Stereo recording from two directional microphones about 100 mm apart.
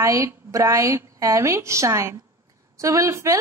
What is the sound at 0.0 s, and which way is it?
A woman's voice, 30° right (ahead or behind).